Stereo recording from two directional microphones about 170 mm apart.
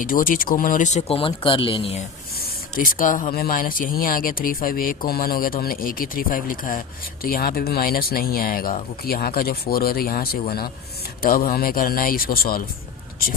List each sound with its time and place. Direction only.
0.0 s speech: 55° left (ahead or behind); by 2.0 s 30° left (ahead or behind)
2.4 s spray: 55° left (ahead or behind)
3.3 s speech: 55° left (ahead or behind)